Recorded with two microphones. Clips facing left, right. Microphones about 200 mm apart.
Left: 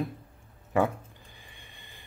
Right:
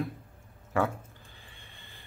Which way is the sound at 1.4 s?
15° left (ahead or behind).